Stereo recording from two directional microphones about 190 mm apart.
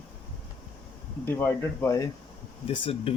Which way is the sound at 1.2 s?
10° left (ahead or behind).